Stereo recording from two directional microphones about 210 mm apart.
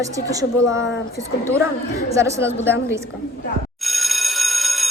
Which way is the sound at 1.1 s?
15° right (ahead or behind).